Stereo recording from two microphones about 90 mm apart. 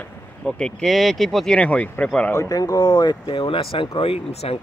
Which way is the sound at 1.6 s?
15° left (ahead or behind).